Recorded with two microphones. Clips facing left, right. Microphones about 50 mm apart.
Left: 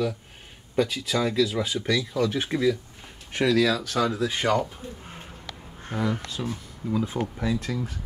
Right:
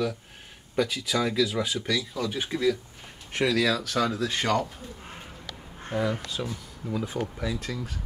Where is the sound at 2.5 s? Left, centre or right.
Left.